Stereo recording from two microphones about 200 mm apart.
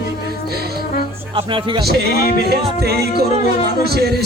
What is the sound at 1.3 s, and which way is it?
Speech, 25° right (ahead or behind).